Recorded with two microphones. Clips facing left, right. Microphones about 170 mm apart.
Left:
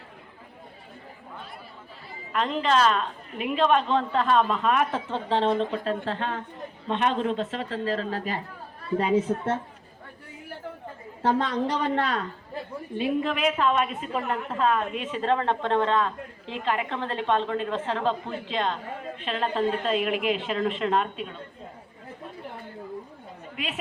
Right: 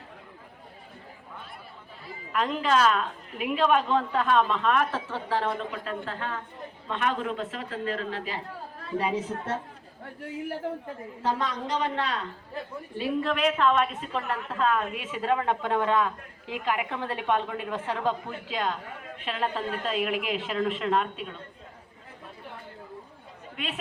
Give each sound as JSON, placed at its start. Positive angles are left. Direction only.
{"t": 2.3, "sound": "a woman's voice", "side_deg": -5}
{"t": 4.9, "sound": "a woman's voice", "side_deg": 20}
{"t": 9.3, "sound": "a woman's voice", "side_deg": 60}
{"t": 11.2, "sound": "a woman's voice", "side_deg": 60}
{"t": 13.0, "sound": "a woman's voice", "side_deg": 20}
{"t": 13.3, "sound": "a woman's voice", "side_deg": 5}
{"t": 23.6, "sound": "a woman's voice", "side_deg": 5}